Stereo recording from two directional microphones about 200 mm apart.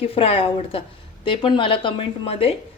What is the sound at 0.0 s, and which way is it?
A woman's voice, 30° left (ahead or behind).